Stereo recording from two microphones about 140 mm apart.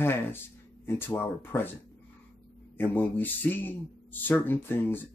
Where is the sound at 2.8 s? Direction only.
15° left (ahead or behind).